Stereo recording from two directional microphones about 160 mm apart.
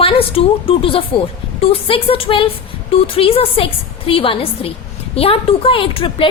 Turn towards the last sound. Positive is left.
turn(degrees=35)  # may be behind; listen again after turning